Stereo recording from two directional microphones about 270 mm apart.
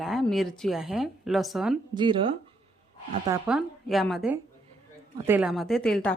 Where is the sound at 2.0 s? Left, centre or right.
Centre.